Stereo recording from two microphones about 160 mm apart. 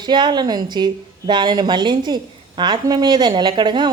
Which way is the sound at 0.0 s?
30° right (ahead or behind).